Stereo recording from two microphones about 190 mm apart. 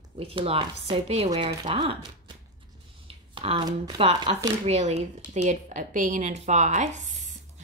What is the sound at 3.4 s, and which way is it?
Speech, 30° right (ahead or behind).